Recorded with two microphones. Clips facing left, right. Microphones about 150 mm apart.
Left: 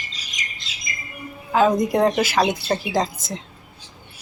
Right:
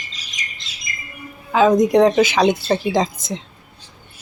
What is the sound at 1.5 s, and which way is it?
Speech, 5° left (ahead or behind).